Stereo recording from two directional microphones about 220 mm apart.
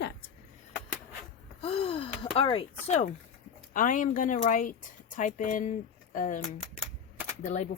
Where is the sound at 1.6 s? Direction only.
25° left (ahead or behind).